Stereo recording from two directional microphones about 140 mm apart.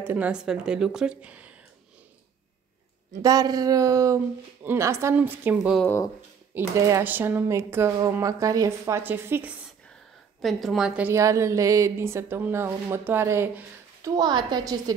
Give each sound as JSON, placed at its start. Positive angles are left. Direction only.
{"t": 0.0, "sound": "speech", "side_deg": -10}
{"t": 3.2, "sound": "a woman's voice", "side_deg": -25}
{"t": 5.6, "sound": "a woman's voice", "side_deg": 0}
{"t": 6.5, "sound": "speech", "side_deg": -20}
{"t": 10.4, "sound": "a woman's voice", "side_deg": 0}
{"t": 11.1, "sound": "a woman's voice", "side_deg": -20}